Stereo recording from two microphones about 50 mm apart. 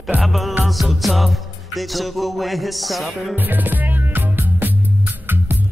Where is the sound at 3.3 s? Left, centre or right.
Right.